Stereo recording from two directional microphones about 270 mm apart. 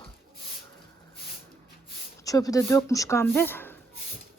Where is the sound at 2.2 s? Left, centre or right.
Centre.